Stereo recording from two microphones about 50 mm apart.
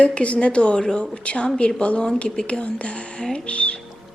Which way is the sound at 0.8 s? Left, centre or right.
Centre.